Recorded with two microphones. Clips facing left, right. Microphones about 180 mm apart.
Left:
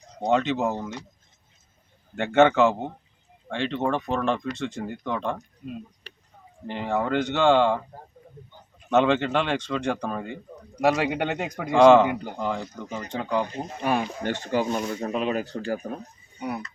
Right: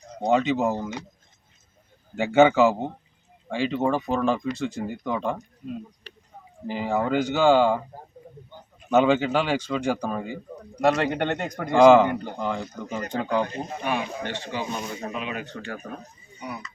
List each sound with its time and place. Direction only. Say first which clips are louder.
0.2 s speech: right 1 dB; 5° right (ahead or behind)
2.1 s speech: right 1 dB; 5° right (ahead or behind)
6.7 s speech: right 1 dB; 5° right (ahead or behind)
8.9 s speech: right 1 dB; 5° right (ahead or behind)
13.8 s speech: left 4 dB; 45° left (ahead or behind)